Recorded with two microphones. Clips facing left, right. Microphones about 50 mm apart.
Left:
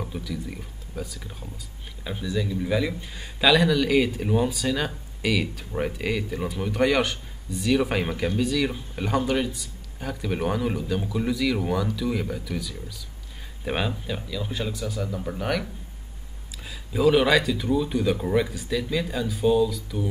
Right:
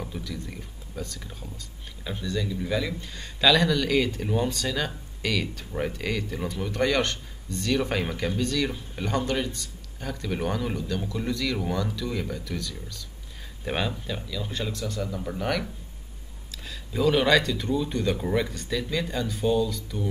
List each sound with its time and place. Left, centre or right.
0.0 s a man's voice: centre